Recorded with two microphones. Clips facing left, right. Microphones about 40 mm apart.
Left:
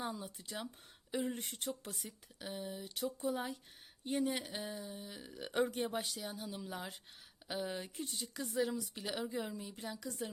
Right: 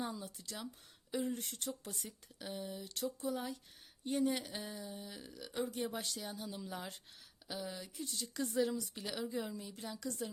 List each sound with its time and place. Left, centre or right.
0.1 s speech: centre
1.9 s speech: centre
3.2 s speech: left
5.4 s speech: left
5.7 s speech: left
6.0 s speech: centre
7.4 s speech: left
8.1 s speech: centre